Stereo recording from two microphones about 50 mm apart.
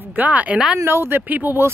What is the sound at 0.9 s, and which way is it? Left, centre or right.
Speech, right.